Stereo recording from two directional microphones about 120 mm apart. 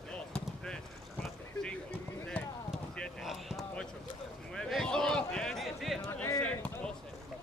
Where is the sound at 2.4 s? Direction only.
10° left (ahead or behind).